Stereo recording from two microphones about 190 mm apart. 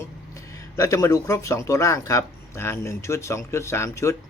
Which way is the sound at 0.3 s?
15° left (ahead or behind).